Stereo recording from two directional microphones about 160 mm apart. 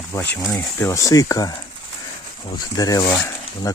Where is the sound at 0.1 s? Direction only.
15° left (ahead or behind).